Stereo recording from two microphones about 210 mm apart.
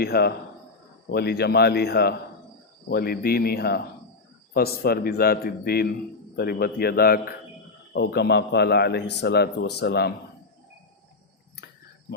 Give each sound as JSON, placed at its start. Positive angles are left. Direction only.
{"t": 0.0, "sound": "a man's voice", "side_deg": 50}